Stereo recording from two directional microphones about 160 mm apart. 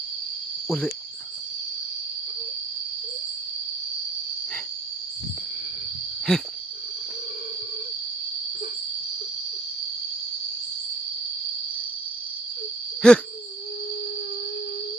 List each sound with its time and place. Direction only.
0.7 s speech: 5° left (ahead or behind)
6.3 s speech: 5° left (ahead or behind)
13.0 s speech: 5° left (ahead or behind)